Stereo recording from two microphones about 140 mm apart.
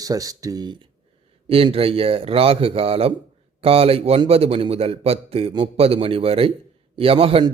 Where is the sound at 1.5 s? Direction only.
40° right (ahead or behind).